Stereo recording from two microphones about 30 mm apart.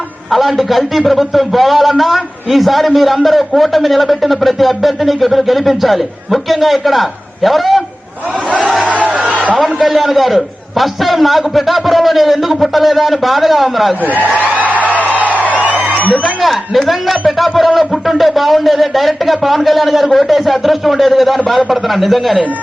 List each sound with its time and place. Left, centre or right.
0.3 s a man's voice: centre
8.9 s a sound: right
9.6 s a man's voice: centre
14.0 s a man's voice: right
14.4 s a sound: right
15.0 s music: right
16.4 s a man's voice: centre